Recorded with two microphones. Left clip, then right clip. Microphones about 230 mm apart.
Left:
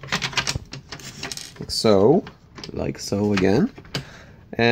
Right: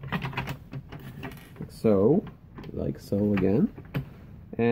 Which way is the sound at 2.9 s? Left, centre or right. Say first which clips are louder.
Left 5 dB; left.